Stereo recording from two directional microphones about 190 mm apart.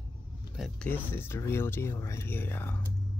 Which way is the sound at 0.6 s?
5° left (ahead or behind).